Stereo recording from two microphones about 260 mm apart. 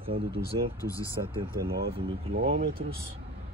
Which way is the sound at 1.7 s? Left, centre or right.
Right.